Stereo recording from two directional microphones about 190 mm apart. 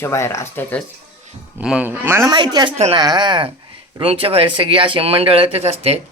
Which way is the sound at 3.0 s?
20° right (ahead or behind).